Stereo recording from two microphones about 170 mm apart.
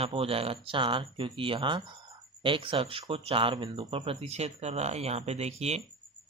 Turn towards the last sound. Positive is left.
turn(degrees=-40)  # may be behind; listen again after turning